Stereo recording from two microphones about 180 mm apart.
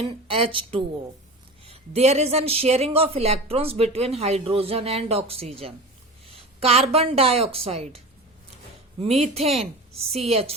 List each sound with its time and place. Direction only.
0.0 s a woman's voice: 30° right (ahead or behind)
9.0 s speech: 35° right (ahead or behind)